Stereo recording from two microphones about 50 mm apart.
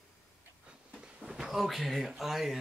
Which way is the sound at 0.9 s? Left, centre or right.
Centre.